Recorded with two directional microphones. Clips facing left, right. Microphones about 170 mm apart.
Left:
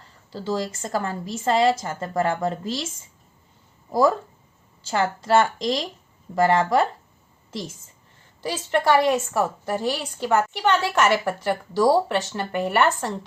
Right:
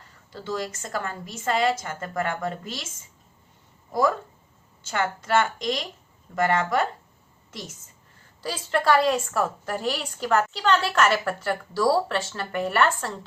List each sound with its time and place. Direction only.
0.3 s a woman's voice: 30° left (ahead or behind)
5.2 s a woman's voice: 30° left (ahead or behind)
8.4 s a woman's voice: 20° left (ahead or behind)